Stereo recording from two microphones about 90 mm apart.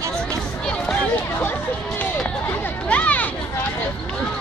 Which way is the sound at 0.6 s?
10° left (ahead or behind).